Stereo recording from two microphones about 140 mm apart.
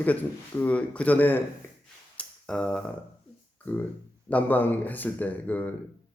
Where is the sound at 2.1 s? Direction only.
5° left (ahead or behind).